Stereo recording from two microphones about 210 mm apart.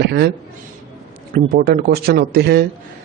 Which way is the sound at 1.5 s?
45° right (ahead or behind).